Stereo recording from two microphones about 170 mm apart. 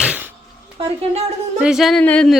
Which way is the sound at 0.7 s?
35° right (ahead or behind).